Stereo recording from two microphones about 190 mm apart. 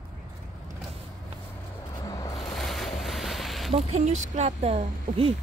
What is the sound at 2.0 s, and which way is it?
Music, 20° left (ahead or behind).